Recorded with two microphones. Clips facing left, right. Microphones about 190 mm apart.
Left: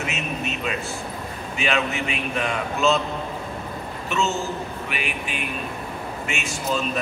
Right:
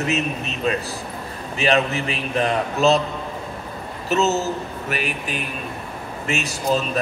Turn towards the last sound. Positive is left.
turn(degrees=-35)  # may be behind; listen again after turning